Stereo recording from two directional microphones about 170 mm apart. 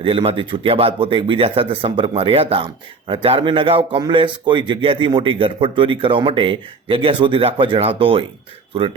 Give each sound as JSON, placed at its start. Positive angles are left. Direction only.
{"t": 0.0, "sound": "a man's voice", "side_deg": -30}